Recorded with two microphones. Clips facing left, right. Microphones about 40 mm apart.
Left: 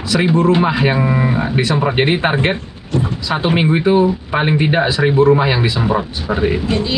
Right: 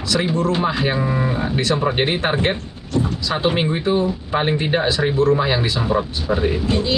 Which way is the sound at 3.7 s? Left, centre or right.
Left.